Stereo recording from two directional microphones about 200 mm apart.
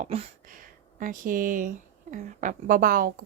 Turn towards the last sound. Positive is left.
turn(degrees=-45)  # may be behind; listen again after turning